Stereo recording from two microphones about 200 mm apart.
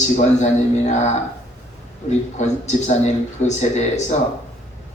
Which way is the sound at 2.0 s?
35° left (ahead or behind).